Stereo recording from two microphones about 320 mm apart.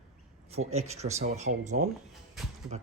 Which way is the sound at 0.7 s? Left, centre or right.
Centre.